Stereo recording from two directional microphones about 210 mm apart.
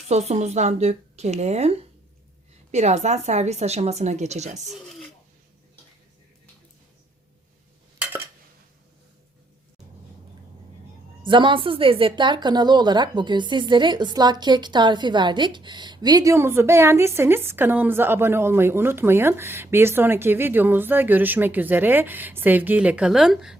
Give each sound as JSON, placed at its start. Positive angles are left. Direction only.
{"t": 0.1, "sound": "speech", "side_deg": -30}
{"t": 11.3, "sound": "a woman's voice", "side_deg": -25}